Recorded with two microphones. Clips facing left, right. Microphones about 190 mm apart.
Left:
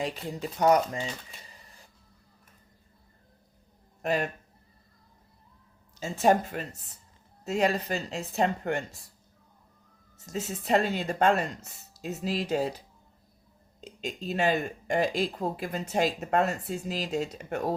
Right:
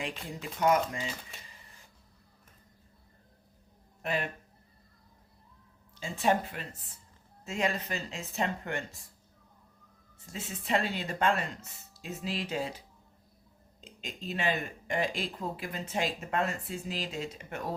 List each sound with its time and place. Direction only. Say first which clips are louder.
0.0 s speech: left 6 dB; 35° left (ahead or behind)
4.0 s speech: left 5 dB; 45° left (ahead or behind)
5.9 s speech: left 5 dB; 40° left (ahead or behind)
10.2 s speech: left 6 dB; 40° left (ahead or behind)
13.8 s speech: left 6 dB; 40° left (ahead or behind)